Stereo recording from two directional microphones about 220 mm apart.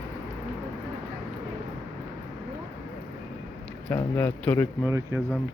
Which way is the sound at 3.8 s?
10° left (ahead or behind).